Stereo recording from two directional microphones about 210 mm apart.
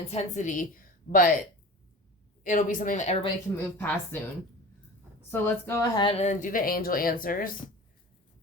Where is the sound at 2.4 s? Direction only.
40° left (ahead or behind).